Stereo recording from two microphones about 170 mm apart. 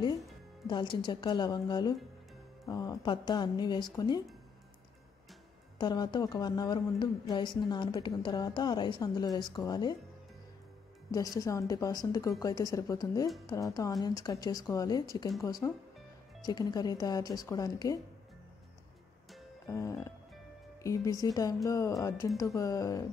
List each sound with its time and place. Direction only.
0.7 s a woman's voice: 25° left (ahead or behind)
5.8 s a woman's voice: 25° left (ahead or behind)
11.1 s a woman's voice: 20° left (ahead or behind)
19.7 s music: 15° left (ahead or behind)
20.8 s a woman's voice: 20° left (ahead or behind)